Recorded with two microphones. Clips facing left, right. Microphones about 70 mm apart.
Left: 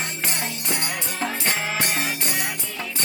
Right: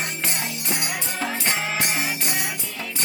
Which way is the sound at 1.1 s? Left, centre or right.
Centre.